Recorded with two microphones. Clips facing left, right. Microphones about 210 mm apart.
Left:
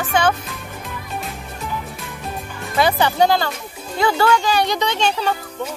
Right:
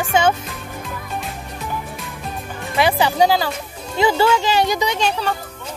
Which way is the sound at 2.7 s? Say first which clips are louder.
Even; 5° right (ahead or behind).